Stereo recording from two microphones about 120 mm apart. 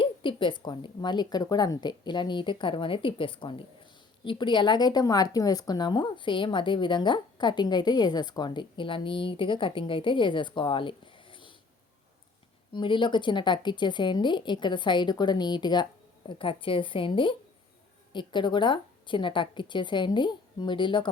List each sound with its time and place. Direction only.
0.0 s a woman's voice: 45° left (ahead or behind)
12.7 s a woman's voice: 45° left (ahead or behind)